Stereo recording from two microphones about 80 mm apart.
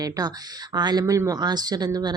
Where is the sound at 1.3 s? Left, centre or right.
Right.